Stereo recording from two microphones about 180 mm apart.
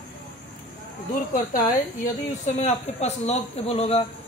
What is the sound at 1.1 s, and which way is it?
Speech, 50° left (ahead or behind).